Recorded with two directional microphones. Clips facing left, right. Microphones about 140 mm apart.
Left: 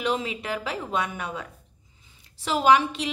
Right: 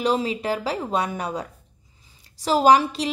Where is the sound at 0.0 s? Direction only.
35° right (ahead or behind).